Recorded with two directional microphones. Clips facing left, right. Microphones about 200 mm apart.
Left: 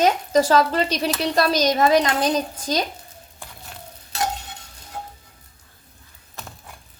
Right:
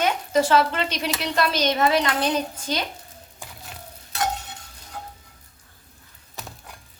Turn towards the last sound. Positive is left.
turn(degrees=0)  # may be behind; listen again after turning